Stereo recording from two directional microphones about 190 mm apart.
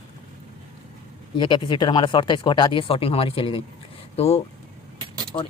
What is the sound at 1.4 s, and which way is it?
Speech, 25° left (ahead or behind).